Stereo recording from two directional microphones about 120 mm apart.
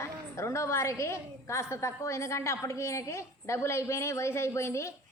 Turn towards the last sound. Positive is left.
turn(degrees=25)  # may be behind; listen again after turning